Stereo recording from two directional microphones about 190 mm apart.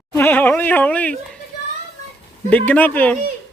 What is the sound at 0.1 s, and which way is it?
Speech, 10° left (ahead or behind).